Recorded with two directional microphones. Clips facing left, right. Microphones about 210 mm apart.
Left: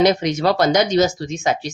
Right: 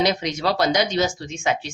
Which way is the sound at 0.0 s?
50° left (ahead or behind).